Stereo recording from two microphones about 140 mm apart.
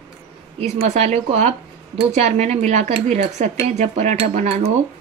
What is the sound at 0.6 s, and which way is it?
Speech, 50° right (ahead or behind).